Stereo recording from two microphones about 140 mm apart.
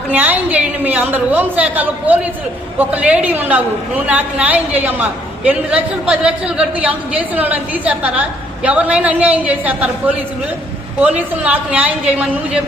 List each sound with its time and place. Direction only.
0.1 s a woman's voice: 10° right (ahead or behind)
11.4 s a woman's voice: 10° right (ahead or behind)